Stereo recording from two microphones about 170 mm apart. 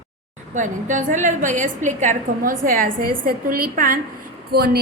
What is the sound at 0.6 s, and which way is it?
A woman's voice, 45° right (ahead or behind).